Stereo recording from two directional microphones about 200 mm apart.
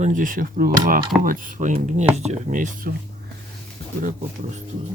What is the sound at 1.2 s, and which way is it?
Speech, 45° right (ahead or behind).